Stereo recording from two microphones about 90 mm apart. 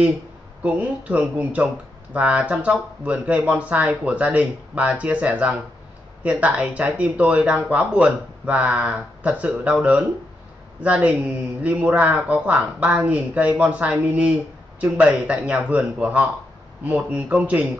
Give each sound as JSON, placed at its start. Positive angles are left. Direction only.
{"t": 0.7, "sound": "speech", "side_deg": -15}